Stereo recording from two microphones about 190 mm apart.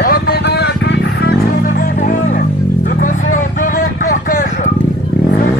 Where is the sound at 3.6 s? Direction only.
45° left (ahead or behind).